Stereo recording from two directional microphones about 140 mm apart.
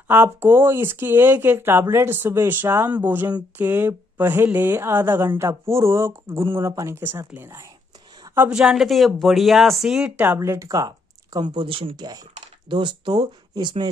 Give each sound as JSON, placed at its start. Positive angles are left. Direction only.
{"t": 0.1, "sound": "speech", "side_deg": -15}
{"t": 8.4, "sound": "speech", "side_deg": -5}